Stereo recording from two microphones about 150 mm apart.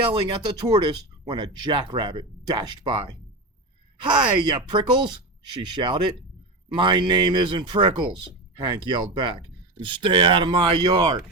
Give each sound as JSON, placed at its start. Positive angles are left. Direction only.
{"t": 0.1, "sound": "speech", "side_deg": -35}
{"t": 4.0, "sound": "speech", "side_deg": -30}